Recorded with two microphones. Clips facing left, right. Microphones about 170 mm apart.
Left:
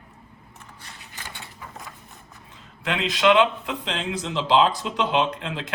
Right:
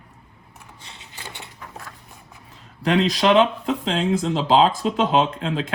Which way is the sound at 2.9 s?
40° right (ahead or behind).